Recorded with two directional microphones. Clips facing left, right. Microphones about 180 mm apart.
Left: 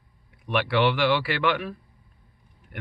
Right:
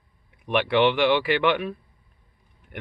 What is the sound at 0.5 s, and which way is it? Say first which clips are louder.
Speech: right 3 dB; 20° right (ahead or behind).